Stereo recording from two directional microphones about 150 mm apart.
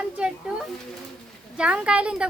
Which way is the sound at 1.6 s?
10° right (ahead or behind).